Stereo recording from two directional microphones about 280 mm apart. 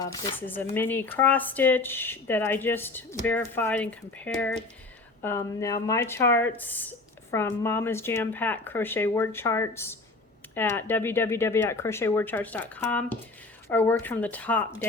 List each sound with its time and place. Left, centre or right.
0.0 s speech: centre